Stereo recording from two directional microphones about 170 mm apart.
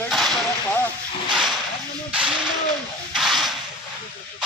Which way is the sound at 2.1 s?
5° right (ahead or behind).